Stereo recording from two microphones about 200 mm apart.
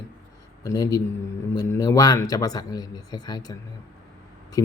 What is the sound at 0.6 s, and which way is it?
Speech, 15° left (ahead or behind).